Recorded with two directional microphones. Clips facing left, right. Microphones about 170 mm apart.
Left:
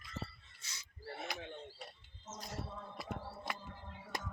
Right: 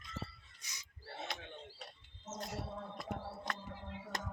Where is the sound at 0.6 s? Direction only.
15° right (ahead or behind).